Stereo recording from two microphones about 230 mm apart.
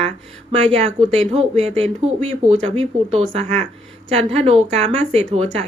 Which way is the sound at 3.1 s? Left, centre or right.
Right.